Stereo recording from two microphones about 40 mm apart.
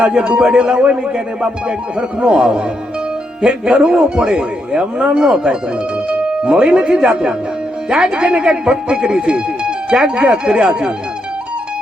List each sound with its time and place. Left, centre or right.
0.0 s speech: right